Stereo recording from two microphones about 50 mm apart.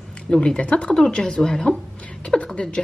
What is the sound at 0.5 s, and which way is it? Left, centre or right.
A woman's voice, left.